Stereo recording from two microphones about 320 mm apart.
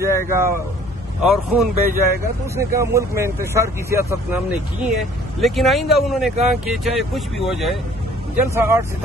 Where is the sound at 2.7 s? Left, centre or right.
Centre.